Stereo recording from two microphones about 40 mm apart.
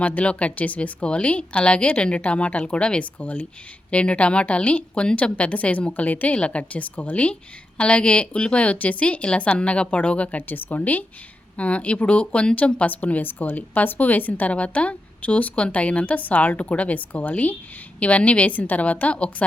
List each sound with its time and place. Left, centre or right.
0.2 s a woman's voice: left
0.8 s speech: left
3.2 s a woman's voice: left
3.9 s a woman's voice: left
10.5 s a woman's voice: left
14.5 s a woman's voice: left